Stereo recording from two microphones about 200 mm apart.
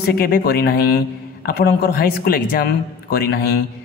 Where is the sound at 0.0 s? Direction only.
50° left (ahead or behind).